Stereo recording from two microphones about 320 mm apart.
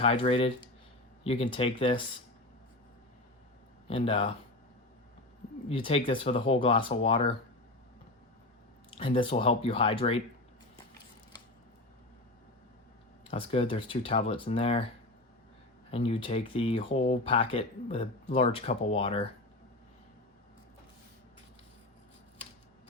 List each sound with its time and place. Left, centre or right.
0.0 s speech: centre
3.8 s speech: centre
5.6 s speech: centre
9.0 s speech: centre
13.3 s speech: centre
15.9 s speech: centre